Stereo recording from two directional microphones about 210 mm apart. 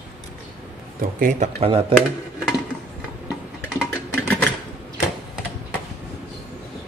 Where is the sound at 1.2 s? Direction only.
35° right (ahead or behind).